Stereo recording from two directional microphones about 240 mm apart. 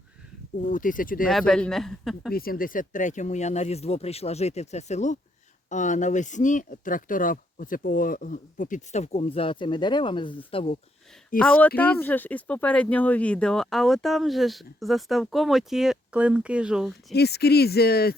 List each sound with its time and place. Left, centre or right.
0.6 s speech: left
1.3 s speech: centre
2.3 s speech: left
11.3 s speech: centre
17.2 s speech: left